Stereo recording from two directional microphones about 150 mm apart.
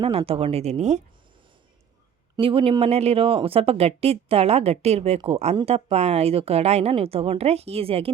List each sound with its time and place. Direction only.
0.0 s a woman's voice: 40° right (ahead or behind)
2.4 s a woman's voice: 35° right (ahead or behind)